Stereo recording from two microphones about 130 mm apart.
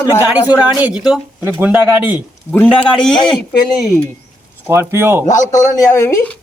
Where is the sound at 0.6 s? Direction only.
10° right (ahead or behind).